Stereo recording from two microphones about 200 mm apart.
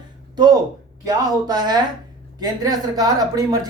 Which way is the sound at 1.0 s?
20° right (ahead or behind).